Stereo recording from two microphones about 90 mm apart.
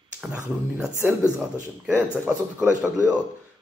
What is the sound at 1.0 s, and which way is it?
Speech, 25° right (ahead or behind).